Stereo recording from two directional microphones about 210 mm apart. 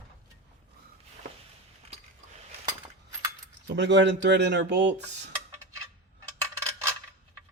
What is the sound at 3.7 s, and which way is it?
Speech, 55° right (ahead or behind).